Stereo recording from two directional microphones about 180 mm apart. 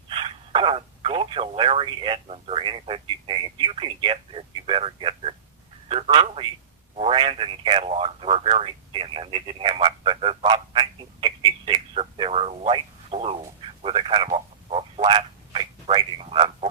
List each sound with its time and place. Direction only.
0.1 s a man's voice: 30° right (ahead or behind)